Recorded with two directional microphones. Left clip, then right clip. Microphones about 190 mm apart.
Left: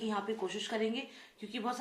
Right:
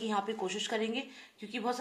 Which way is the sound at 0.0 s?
40° right (ahead or behind).